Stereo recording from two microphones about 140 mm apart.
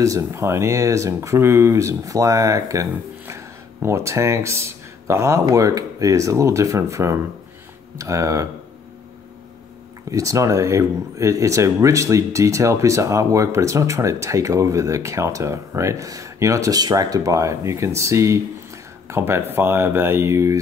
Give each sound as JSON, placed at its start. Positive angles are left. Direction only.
{"t": 0.0, "sound": "speech", "side_deg": -20}
{"t": 10.1, "sound": "speech", "side_deg": -20}